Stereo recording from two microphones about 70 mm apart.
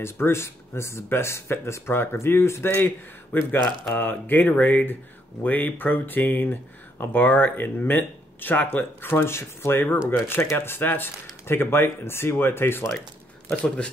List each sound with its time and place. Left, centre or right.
0.0 s speech: left
13.5 s speech: centre